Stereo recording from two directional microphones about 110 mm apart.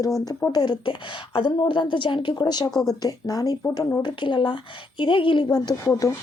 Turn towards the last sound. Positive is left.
turn(degrees=30)  # may be behind; listen again after turning